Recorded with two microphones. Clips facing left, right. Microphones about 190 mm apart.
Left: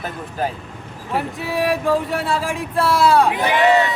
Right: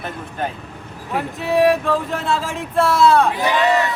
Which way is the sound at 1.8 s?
10° left (ahead or behind).